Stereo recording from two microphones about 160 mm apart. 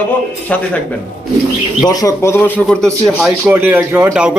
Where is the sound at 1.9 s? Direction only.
20° left (ahead or behind).